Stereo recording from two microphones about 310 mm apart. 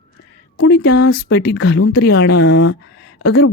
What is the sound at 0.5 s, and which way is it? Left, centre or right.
Speech, left.